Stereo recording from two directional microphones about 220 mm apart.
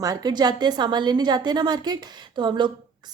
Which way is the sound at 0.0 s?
15° right (ahead or behind).